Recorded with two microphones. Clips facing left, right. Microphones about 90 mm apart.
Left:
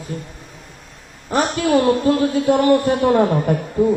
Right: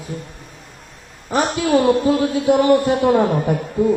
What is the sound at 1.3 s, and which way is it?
A man's voice, 15° right (ahead or behind).